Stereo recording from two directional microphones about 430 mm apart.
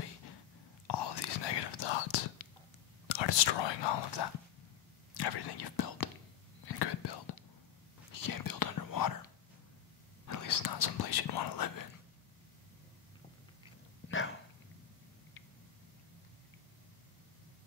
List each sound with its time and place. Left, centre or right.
0.8 s whispering: left
3.1 s speech: left
5.1 s whispering: left
8.1 s whispering: left
14.0 s dog: left